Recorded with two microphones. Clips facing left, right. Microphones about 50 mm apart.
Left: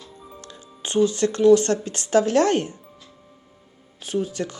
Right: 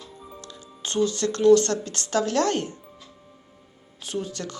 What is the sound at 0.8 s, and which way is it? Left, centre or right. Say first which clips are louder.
Speech: left 4 dB; left.